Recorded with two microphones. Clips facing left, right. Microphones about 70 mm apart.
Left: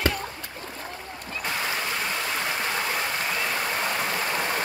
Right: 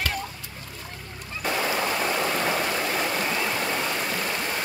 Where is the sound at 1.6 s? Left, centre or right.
Right.